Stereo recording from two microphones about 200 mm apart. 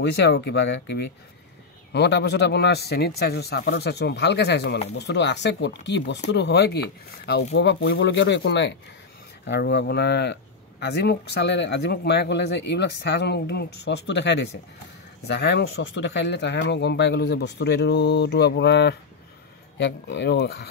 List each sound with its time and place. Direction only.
0.0 s speech: 60° left (ahead or behind)